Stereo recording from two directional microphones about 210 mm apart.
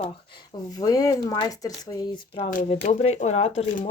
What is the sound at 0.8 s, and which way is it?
Speech, 15° left (ahead or behind).